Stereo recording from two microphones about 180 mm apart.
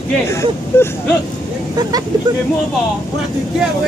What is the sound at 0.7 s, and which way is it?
Speech, 15° left (ahead or behind).